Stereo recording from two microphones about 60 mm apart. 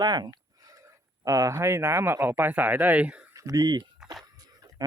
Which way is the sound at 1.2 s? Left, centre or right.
Right.